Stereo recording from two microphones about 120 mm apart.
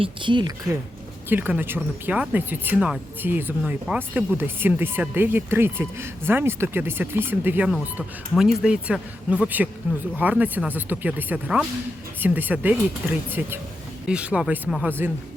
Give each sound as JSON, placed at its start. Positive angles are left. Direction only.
{"t": 0.0, "sound": "speech", "side_deg": -40}
{"t": 1.3, "sound": "speech", "side_deg": -15}
{"t": 3.6, "sound": "speech", "side_deg": -5}
{"t": 3.9, "sound": "speech", "side_deg": -15}
{"t": 8.4, "sound": "speech", "side_deg": -5}